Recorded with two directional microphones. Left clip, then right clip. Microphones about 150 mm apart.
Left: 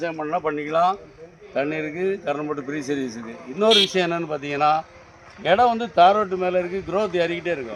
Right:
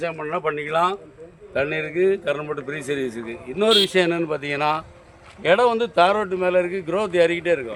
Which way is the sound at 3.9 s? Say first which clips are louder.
Right 3 dB; 65° right (ahead or behind).